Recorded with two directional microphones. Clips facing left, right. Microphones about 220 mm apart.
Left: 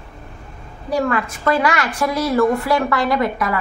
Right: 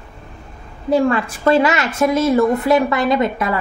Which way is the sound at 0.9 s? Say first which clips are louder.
Right 4 dB; 25° right (ahead or behind).